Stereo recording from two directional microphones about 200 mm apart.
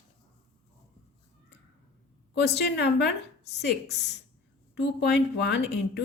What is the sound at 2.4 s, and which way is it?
Speech, 55° left (ahead or behind).